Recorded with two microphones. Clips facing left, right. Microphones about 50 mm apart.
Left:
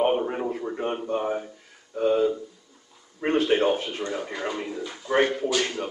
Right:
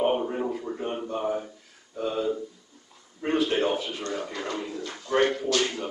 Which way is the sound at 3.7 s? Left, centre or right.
Left.